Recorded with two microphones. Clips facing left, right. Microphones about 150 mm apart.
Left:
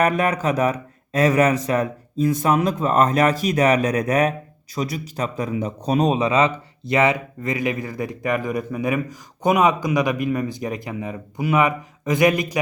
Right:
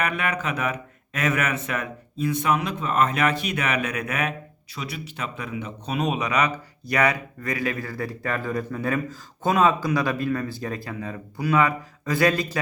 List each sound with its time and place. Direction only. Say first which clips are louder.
0.0 s speech: left 7 dB; 40° left (ahead or behind); by 12.5 s 15° left (ahead or behind)